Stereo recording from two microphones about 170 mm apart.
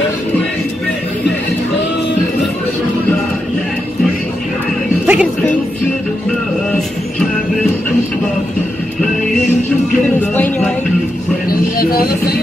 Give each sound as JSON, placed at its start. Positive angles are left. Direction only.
{"t": 5.0, "sound": "music", "side_deg": -5}
{"t": 10.3, "sound": "music", "side_deg": 10}
{"t": 11.4, "sound": "music", "side_deg": 60}